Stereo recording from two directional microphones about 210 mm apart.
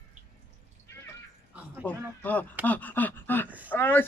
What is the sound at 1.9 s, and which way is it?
Speech, 5° left (ahead or behind).